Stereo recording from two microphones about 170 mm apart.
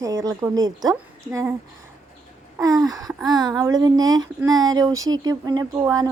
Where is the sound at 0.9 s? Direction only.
10° right (ahead or behind).